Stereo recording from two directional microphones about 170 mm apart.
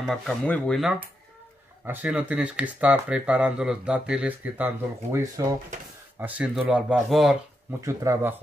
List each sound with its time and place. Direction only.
0.0 s speech: centre (ahead or behind)
1.9 s speech: 10° right (ahead or behind)
7.8 s speech: 15° right (ahead or behind)